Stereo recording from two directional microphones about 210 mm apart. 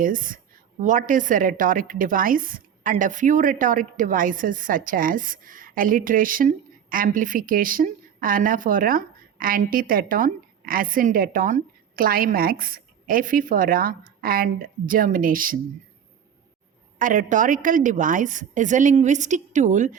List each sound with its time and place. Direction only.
0.0 s a woman's voice: 40° right (ahead or behind)
17.0 s a woman's voice: 40° right (ahead or behind)